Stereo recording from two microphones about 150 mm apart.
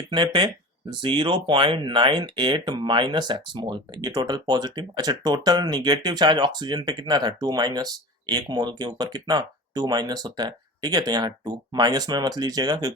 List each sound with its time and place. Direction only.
0.1 s speech: 35° right (ahead or behind)